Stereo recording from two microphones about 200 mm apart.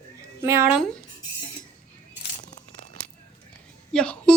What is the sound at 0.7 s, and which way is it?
Speech, 5° left (ahead or behind).